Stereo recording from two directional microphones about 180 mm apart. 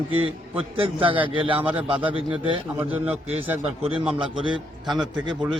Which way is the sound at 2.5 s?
30° right (ahead or behind).